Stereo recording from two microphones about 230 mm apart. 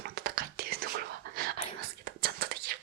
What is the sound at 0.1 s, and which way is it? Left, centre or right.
Whispering, right.